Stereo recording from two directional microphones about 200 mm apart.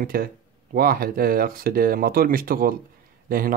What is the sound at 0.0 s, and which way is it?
Speech, 45° right (ahead or behind).